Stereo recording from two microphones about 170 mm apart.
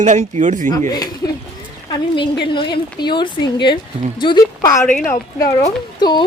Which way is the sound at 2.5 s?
30° left (ahead or behind).